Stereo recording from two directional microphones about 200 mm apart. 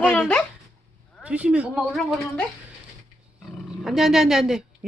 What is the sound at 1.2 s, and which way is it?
Speech, 5° right (ahead or behind).